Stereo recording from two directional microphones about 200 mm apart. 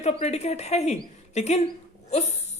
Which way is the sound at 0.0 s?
35° left (ahead or behind).